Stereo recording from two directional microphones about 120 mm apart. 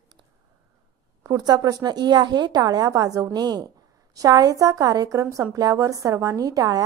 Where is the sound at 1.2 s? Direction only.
35° right (ahead or behind).